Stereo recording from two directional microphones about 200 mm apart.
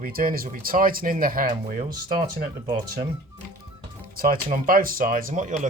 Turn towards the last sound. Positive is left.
turn(degrees=-40)  # may be behind; listen again after turning